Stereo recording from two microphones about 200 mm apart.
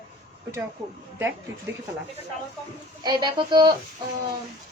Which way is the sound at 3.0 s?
20° right (ahead or behind).